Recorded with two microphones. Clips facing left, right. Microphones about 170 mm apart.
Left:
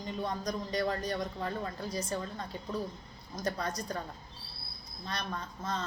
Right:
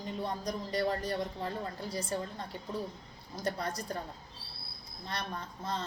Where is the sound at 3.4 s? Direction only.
30° right (ahead or behind).